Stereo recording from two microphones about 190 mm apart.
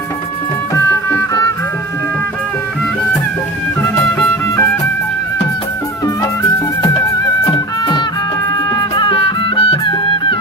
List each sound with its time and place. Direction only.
0.7 s music: 15° left (ahead or behind)
8.7 s music: 25° left (ahead or behind)